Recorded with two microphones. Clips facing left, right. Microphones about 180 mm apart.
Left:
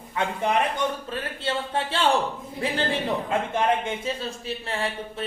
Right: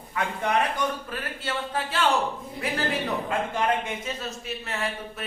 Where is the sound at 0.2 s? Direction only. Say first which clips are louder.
Left 2 dB; 25° left (ahead or behind).